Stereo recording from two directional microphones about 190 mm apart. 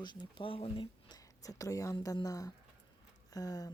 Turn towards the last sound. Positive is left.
turn(degrees=20)  # may be behind; listen again after turning